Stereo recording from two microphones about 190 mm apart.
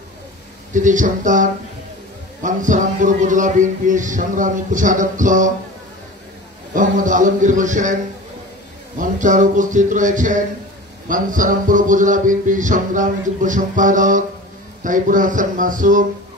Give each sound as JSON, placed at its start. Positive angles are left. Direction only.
{"t": 0.7, "sound": "speech", "side_deg": -40}
{"t": 6.7, "sound": "speech", "side_deg": -45}
{"t": 8.9, "sound": "mantra", "side_deg": -40}